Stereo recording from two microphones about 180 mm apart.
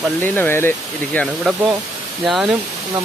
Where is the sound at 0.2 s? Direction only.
10° left (ahead or behind).